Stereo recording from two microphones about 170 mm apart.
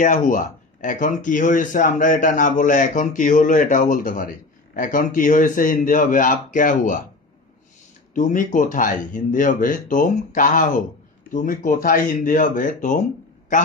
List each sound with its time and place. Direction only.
0.0 s speech: 50° left (ahead or behind)
8.1 s speech: 50° left (ahead or behind)